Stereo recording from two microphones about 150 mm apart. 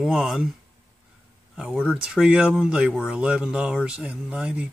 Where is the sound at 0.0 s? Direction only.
Centre (ahead or behind).